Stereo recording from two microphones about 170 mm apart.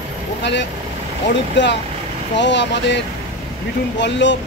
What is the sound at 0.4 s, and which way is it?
Speech, 90° left.